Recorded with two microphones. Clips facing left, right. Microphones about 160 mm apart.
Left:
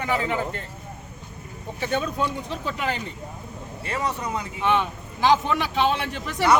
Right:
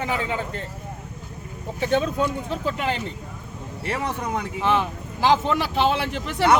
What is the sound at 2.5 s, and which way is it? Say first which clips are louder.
Speech: right 3 dB; 30° right (ahead or behind).